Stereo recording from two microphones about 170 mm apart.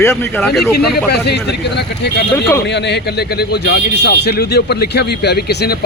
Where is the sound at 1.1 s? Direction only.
75° left (ahead or behind).